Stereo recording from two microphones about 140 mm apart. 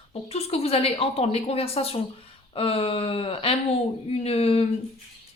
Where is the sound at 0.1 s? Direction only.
45° left (ahead or behind).